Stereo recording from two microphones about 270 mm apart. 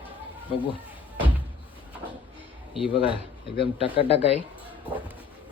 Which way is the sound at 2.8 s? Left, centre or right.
Centre.